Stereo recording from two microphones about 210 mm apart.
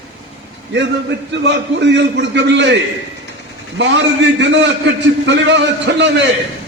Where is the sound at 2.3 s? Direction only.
55° right (ahead or behind).